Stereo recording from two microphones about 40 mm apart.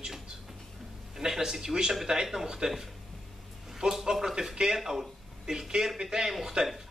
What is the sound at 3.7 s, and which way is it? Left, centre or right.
Speech, centre.